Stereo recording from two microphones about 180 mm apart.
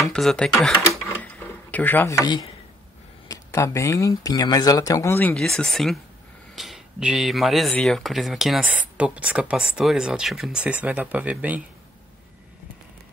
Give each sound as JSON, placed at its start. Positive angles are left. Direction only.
{"t": 0.0, "sound": "speech", "side_deg": 0}
{"t": 1.0, "sound": "rub", "side_deg": 10}
{"t": 3.3, "sound": "speech", "side_deg": 15}